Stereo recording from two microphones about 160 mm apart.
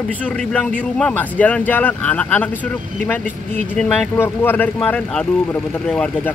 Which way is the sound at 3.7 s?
5° left (ahead or behind).